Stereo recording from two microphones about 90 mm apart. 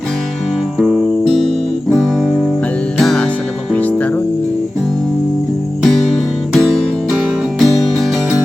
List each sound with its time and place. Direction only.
0.8 s music: centre (ahead or behind)
3.8 s music: 15° left (ahead or behind)
5.8 s music: centre (ahead or behind)